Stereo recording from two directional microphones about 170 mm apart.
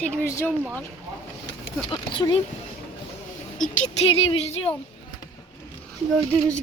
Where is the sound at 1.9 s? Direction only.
30° left (ahead or behind).